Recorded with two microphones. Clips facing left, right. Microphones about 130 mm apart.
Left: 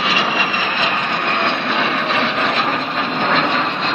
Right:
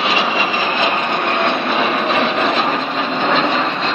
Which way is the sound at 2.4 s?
5° right (ahead or behind).